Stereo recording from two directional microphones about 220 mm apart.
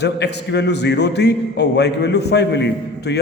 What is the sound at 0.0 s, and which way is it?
Speech, 50° left (ahead or behind).